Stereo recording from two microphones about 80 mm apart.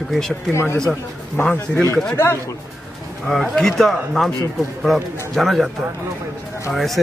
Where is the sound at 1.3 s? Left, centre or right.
Left.